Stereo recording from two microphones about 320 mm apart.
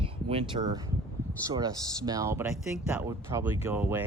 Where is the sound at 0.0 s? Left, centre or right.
Centre.